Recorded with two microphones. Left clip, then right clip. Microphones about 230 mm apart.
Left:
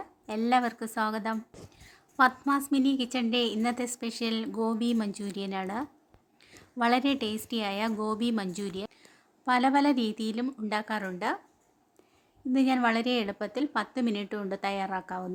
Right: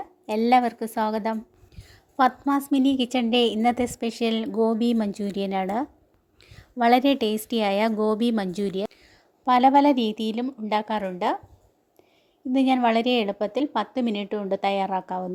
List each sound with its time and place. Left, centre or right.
0.3 s a woman's voice: centre
12.5 s a woman's voice: centre